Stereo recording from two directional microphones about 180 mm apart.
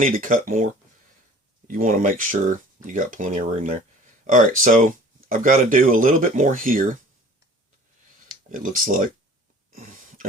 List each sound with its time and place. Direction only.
0.0 s speech: 50° right (ahead or behind)
8.4 s speech: 50° right (ahead or behind)
9.7 s a sound: 40° right (ahead or behind)